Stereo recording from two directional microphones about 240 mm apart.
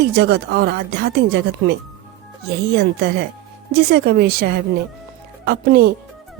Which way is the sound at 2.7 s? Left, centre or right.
Right.